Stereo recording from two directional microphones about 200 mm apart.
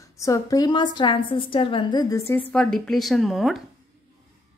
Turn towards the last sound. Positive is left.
turn(degrees=0)  # may be behind; listen again after turning